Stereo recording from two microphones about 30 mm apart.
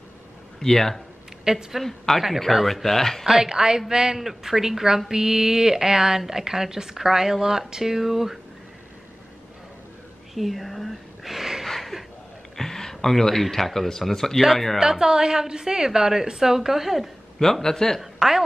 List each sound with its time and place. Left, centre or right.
0.6 s speech: centre
1.4 s a woman's voice: centre
1.8 s speech: centre
3.3 s a woman's voice: centre
4.2 s speech: centre
10.3 s a sound: centre
11.6 s a sound: centre
12.5 s speech: centre
14.8 s a woman's voice: right
17.4 s speech: centre